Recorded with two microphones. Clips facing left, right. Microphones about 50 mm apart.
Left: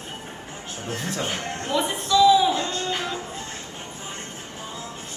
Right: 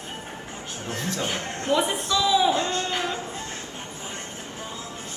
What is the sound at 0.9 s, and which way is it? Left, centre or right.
Speech, left.